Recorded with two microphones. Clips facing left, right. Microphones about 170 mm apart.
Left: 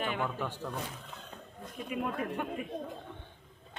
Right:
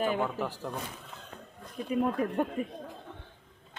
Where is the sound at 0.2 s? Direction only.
15° right (ahead or behind).